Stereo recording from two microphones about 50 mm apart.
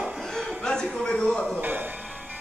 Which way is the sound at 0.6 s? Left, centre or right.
Centre.